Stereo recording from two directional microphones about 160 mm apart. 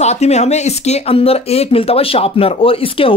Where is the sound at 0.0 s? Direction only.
45° left (ahead or behind).